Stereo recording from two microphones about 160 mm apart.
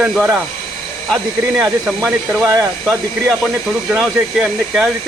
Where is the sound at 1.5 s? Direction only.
10° right (ahead or behind).